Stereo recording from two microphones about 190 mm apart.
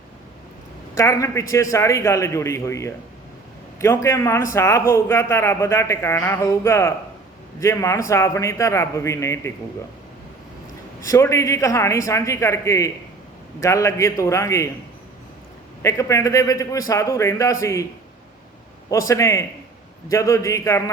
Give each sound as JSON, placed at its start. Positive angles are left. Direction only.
{"t": 0.9, "sound": "a man's voice", "side_deg": 15}
{"t": 11.1, "sound": "a man's voice", "side_deg": 15}
{"t": 15.8, "sound": "a man's voice", "side_deg": 15}
{"t": 18.9, "sound": "a man's voice", "side_deg": 15}